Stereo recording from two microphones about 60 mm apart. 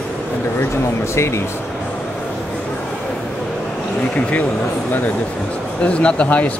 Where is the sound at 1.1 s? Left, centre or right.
Left.